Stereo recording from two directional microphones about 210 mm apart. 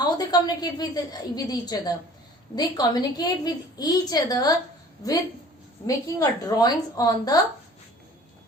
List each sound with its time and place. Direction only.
0.0 s a woman's voice: 20° left (ahead or behind)